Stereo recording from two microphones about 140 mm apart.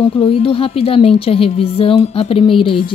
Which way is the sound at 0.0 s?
40° left (ahead or behind).